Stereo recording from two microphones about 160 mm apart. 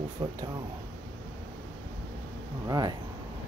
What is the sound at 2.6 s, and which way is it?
Speech, 25° right (ahead or behind).